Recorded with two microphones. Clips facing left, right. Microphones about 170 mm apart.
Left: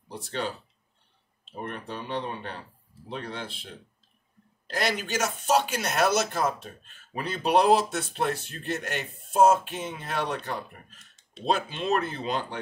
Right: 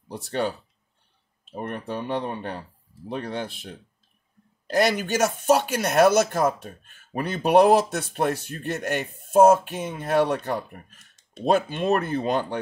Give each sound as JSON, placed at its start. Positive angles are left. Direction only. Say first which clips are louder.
{"t": 0.1, "sound": "speech", "louder": "right 5 dB", "side_deg": -50}
{"t": 4.9, "sound": "speech", "louder": "right 6 dB", "side_deg": -55}